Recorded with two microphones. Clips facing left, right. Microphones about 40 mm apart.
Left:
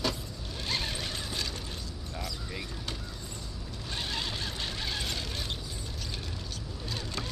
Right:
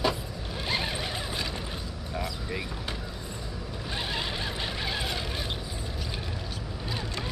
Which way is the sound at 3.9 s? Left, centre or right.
Centre.